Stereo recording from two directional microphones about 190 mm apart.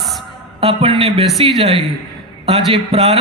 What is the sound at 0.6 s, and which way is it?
A man's voice, 30° right (ahead or behind).